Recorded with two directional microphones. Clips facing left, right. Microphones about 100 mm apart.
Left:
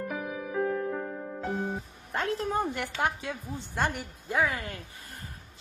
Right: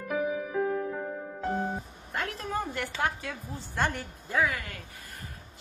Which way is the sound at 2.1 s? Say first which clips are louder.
Left 4 dB; 30° left (ahead or behind).